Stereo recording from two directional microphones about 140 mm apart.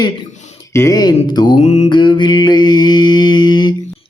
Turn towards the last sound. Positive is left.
turn(degrees=35)  # may be behind; listen again after turning